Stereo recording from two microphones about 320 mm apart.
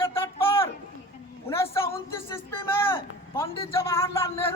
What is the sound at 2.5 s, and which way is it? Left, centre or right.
A man's voice, centre.